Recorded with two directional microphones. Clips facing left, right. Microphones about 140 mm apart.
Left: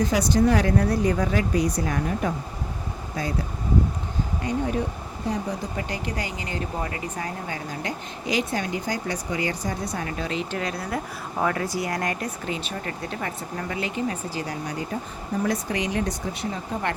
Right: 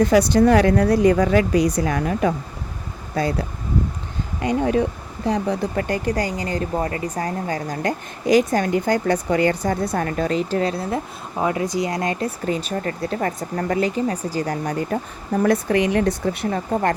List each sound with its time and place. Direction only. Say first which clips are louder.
0.0 s speech: right 6 dB; 65° right (ahead or behind); by 2.3 s 90° right
4.4 s speech: right 7 dB; 90° right
5.2 s speech: right 7 dB; 75° right (ahead or behind)
5.9 s speech: right 8 dB; 45° right (ahead or behind); by 12.3 s 25° right (ahead or behind)
12.5 s speech: right 7 dB; 40° right (ahead or behind); by 16.6 s 60° right (ahead or behind)